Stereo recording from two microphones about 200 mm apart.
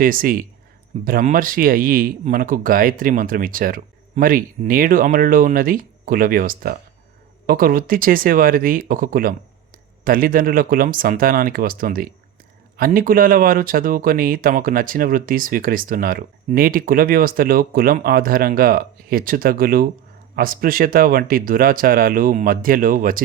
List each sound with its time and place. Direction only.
0.0 s speech: 45° right (ahead or behind)